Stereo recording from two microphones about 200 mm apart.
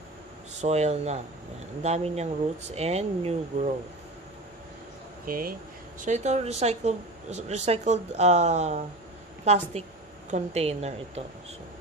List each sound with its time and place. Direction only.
0.6 s speech: 35° right (ahead or behind)
5.2 s speech: 45° right (ahead or behind)